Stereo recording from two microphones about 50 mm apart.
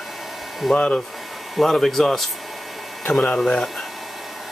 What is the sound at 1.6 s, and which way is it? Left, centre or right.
Speech, centre.